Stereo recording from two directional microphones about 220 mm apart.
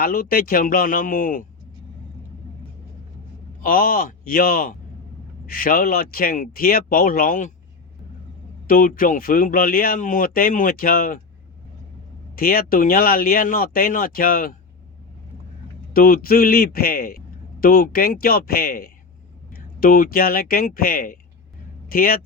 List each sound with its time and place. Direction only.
0.0 s a man's voice: 40° left (ahead or behind)
3.6 s a man's voice: 40° left (ahead or behind)
8.6 s a man's voice: 40° left (ahead or behind)
12.4 s a man's voice: 40° left (ahead or behind)
15.9 s a man's voice: 40° left (ahead or behind)